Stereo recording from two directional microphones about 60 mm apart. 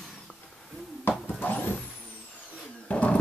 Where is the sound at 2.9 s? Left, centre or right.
Centre.